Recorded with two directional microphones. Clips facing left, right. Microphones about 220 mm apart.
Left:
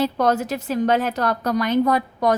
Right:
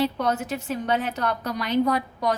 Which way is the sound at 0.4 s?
90° left.